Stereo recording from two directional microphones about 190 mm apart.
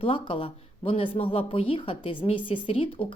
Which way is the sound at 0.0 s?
30° left (ahead or behind).